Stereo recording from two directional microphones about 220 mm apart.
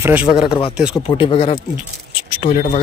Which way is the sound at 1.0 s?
25° left (ahead or behind).